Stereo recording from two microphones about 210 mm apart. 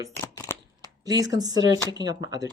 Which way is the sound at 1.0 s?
15° right (ahead or behind).